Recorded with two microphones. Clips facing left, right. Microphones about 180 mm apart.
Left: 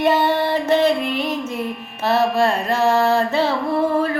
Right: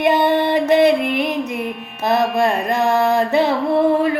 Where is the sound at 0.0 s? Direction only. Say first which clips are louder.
Right 2 dB; 15° right (ahead or behind).